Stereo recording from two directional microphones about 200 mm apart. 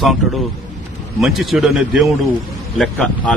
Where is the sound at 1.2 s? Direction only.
Centre (ahead or behind).